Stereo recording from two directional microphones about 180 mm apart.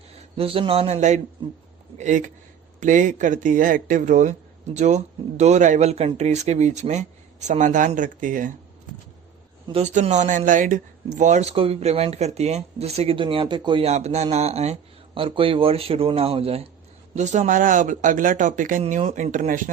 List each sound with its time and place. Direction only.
0.3 s speech: 30° right (ahead or behind); by 8.5 s 45° right (ahead or behind)
9.7 s speech: 40° right (ahead or behind)